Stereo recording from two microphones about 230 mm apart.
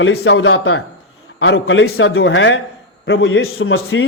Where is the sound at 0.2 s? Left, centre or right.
Left.